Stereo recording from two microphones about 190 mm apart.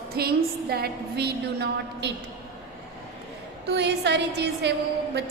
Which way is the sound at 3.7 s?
60° right (ahead or behind).